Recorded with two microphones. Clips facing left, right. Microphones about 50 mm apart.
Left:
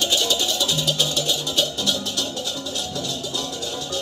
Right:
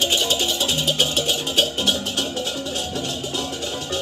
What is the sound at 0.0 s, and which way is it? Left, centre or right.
Music, right.